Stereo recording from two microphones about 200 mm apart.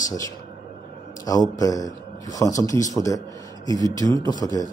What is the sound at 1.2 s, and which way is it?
A man's voice, 20° left (ahead or behind).